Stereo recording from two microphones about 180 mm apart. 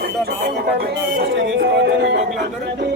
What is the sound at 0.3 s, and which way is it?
Music, 60° right (ahead or behind).